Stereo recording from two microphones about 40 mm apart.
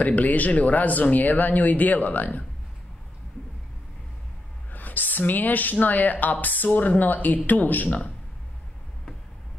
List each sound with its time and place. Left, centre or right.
0.0 s speech: left
4.7 s speech: left